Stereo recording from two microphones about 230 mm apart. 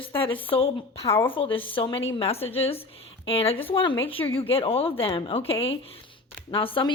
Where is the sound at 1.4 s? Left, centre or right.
Left.